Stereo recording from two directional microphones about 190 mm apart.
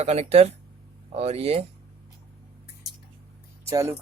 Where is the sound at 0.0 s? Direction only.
35° right (ahead or behind).